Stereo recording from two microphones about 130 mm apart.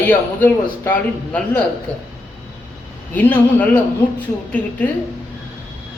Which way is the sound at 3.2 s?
15° left (ahead or behind).